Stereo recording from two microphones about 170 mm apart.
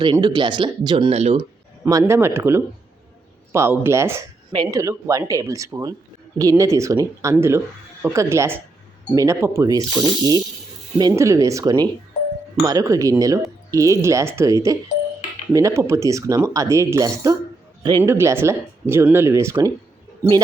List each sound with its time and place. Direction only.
0.0 s speech: 25° right (ahead or behind)
1.8 s speech: 15° right (ahead or behind)